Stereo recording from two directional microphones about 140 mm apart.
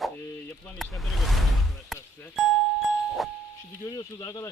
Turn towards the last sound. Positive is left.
turn(degrees=25)  # may be behind; listen again after turning